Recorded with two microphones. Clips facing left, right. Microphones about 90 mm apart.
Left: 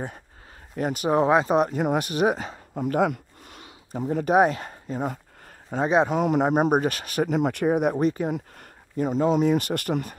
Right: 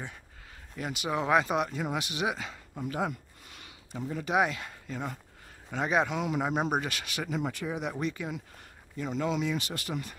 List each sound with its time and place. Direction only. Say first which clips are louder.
0.7 s speech: left 10 dB; 45° left (ahead or behind)
1.3 s a man's voice: left 2 dB; 30° left (ahead or behind)
1.7 s speech: left 9 dB; 50° left (ahead or behind)
2.8 s speech: left 9 dB; 55° left (ahead or behind)
3.5 s speech: left 8 dB; 40° left (ahead or behind)
5.7 s a man's voice: left 7 dB; 30° left (ahead or behind)
6.0 s speech: left 9 dB; 50° left (ahead or behind)